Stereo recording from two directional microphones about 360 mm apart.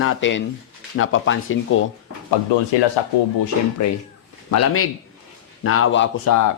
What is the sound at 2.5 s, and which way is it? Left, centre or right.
Speech, left.